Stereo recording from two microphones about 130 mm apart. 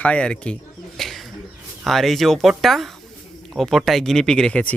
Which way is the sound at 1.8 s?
Centre (ahead or behind).